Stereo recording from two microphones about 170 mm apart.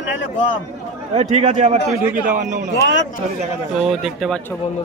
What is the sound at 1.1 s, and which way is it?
A man's voice, 45° right (ahead or behind).